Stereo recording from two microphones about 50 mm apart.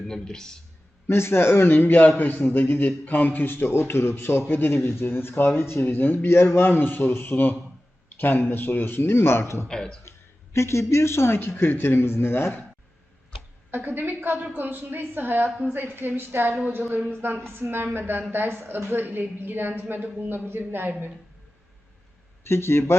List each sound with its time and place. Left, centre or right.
0.1 s speech: centre
1.0 s a woman's voice: left
5.8 s a man's voice: left
9.0 s a woman's voice: left
9.6 s speech: centre
10.1 s a woman's voice: left
13.7 s a woman's voice: right
22.4 s a woman's voice: left